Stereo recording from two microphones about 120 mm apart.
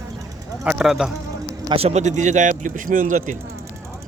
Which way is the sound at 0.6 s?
10° right (ahead or behind).